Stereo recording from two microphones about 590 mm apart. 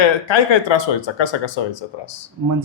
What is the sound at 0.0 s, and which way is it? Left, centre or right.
Speech, left.